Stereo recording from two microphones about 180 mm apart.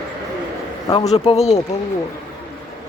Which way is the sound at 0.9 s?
30° left (ahead or behind).